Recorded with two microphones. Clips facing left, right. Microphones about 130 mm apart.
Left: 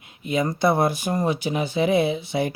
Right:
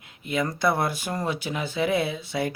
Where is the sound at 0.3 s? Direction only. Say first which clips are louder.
Left 3 dB; 20° left (ahead or behind).